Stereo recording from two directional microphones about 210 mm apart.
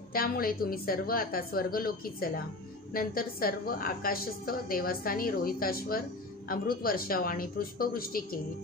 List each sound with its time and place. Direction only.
0.1 s a woman's voice: 45° left (ahead or behind)